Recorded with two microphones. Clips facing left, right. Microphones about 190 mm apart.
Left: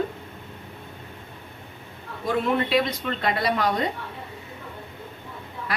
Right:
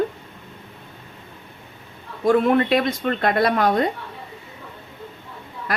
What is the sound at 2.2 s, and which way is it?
A woman's voice, 50° right (ahead or behind).